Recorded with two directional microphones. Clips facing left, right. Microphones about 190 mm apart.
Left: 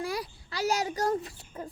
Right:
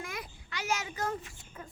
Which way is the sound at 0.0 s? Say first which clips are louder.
Left 8 dB; 35° left (ahead or behind).